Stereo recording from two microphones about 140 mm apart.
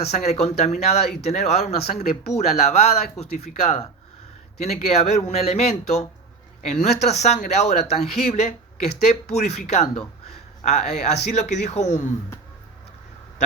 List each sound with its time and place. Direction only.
0.0 s speech: 50° left (ahead or behind)